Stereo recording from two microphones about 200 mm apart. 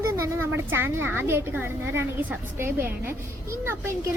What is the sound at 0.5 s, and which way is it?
A woman's voice, 10° right (ahead or behind).